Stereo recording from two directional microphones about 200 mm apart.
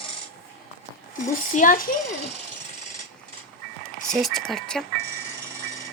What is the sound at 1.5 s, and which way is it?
Speech, 45° left (ahead or behind).